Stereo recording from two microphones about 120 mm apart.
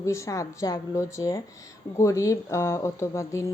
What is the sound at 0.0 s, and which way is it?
A woman's voice, 25° left (ahead or behind).